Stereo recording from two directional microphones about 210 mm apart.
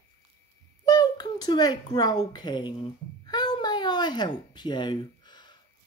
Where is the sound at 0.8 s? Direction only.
20° left (ahead or behind).